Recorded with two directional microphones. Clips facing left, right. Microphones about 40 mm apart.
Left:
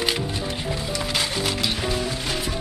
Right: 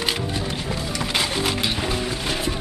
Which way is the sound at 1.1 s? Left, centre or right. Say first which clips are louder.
Right 3 dB; centre.